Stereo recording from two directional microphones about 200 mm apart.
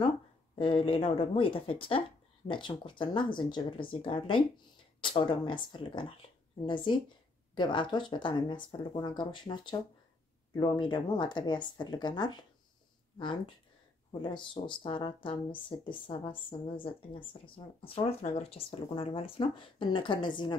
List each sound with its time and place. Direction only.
0.6 s speech: 25° left (ahead or behind)
14.2 s speech: 25° left (ahead or behind)